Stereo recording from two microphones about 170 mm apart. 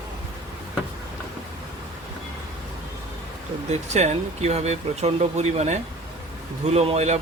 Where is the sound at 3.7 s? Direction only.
40° right (ahead or behind).